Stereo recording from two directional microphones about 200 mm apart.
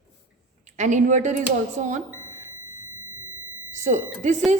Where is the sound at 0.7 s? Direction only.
35° right (ahead or behind).